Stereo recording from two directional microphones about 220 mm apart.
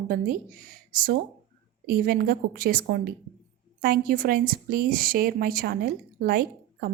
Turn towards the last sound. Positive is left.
turn(degrees=-45)  # may be behind; listen again after turning